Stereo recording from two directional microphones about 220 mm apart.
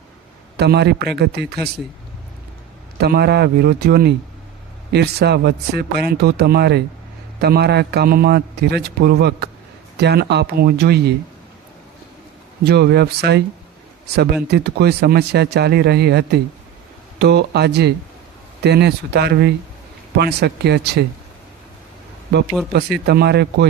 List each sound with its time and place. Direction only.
0.5 s a man's voice: 50° right (ahead or behind)
3.0 s a man's voice: 45° right (ahead or behind)
12.6 s a man's voice: 45° right (ahead or behind)
14.4 s a man's voice: 50° right (ahead or behind)
22.7 s a man's voice: 45° right (ahead or behind)